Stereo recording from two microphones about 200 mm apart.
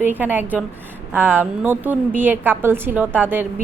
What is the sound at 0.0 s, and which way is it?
A woman's voice, 10° right (ahead or behind).